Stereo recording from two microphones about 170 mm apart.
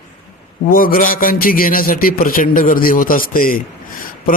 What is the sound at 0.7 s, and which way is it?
A man's voice, 55° left (ahead or behind).